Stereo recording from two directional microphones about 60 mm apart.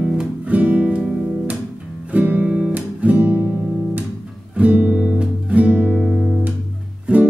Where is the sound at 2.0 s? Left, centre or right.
Right.